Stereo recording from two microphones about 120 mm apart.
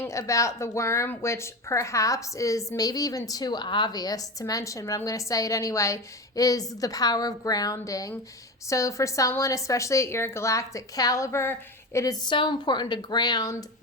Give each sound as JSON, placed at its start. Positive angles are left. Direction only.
{"t": 0.0, "sound": "speech", "side_deg": 25}